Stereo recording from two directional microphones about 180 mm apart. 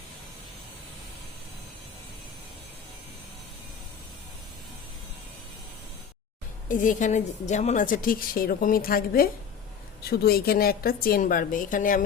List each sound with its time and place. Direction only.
6.7 s a woman's voice: 45° left (ahead or behind)